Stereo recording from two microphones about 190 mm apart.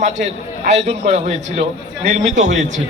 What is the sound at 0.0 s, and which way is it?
A man's voice, 40° right (ahead or behind).